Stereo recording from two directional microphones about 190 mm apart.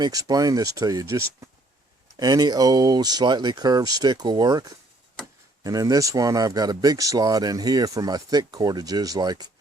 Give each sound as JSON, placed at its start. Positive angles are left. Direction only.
{"t": 0.0, "sound": "speech", "side_deg": -20}